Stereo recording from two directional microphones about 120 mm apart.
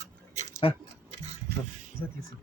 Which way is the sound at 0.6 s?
50° left (ahead or behind).